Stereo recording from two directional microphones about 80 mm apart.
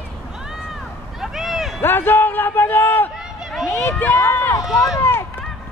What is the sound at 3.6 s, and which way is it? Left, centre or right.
Run, left.